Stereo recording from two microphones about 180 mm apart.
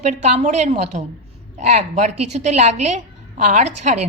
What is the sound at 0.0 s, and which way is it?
A woman's voice, 40° right (ahead or behind).